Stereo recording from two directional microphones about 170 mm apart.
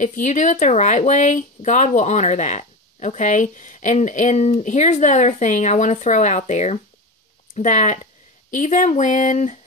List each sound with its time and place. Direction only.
0.0 s speech: 45° left (ahead or behind)